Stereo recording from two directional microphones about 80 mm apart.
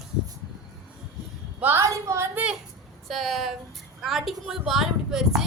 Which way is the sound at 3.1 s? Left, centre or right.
Centre.